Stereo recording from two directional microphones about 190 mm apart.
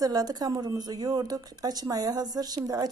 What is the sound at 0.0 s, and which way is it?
Speech, 20° right (ahead or behind).